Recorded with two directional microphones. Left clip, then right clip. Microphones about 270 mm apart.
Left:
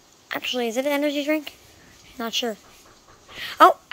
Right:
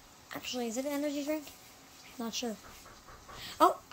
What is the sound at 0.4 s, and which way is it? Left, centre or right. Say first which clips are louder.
A woman's voice: left 12 dB; centre.